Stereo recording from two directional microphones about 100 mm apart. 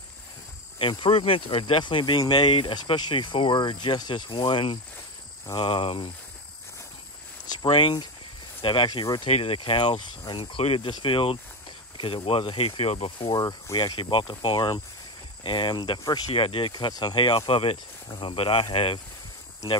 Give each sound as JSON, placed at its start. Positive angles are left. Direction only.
{"t": 0.7, "sound": "speech", "side_deg": 60}
{"t": 7.4, "sound": "speech", "side_deg": 55}
{"t": 9.0, "sound": "speech", "side_deg": 45}
{"t": 9.3, "sound": "speech", "side_deg": 70}
{"t": 10.6, "sound": "speech", "side_deg": 75}
{"t": 10.9, "sound": "speech", "side_deg": 55}
{"t": 13.3, "sound": "speech", "side_deg": 40}
{"t": 14.1, "sound": "speech", "side_deg": 50}
{"t": 16.3, "sound": "speech", "side_deg": 60}
{"t": 17.5, "sound": "speech", "side_deg": 65}